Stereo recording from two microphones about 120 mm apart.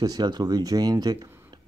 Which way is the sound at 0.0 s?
35° right (ahead or behind).